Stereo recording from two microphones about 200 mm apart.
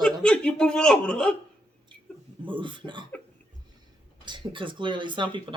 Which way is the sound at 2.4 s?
25° right (ahead or behind).